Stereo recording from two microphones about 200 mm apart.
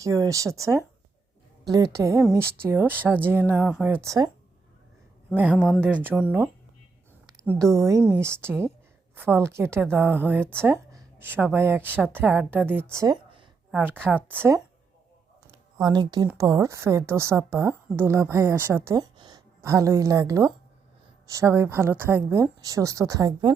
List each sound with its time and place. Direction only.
0.0 s a woman's voice: 15° right (ahead or behind)
5.3 s a woman's voice: 10° right (ahead or behind)
5.5 s speech: 10° left (ahead or behind)
5.8 s a woman's voice: 10° right (ahead or behind)